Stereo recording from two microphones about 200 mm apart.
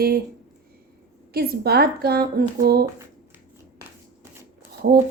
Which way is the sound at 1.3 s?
50° right (ahead or behind).